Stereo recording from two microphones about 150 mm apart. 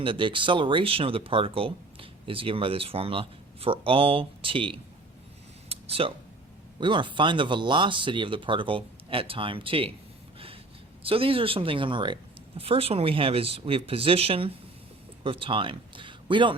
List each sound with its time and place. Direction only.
0.0 s speech: 35° right (ahead or behind)
5.6 s a sound: 40° right (ahead or behind)
6.7 s speech: 30° right (ahead or behind)
11.0 s speech: 40° right (ahead or behind)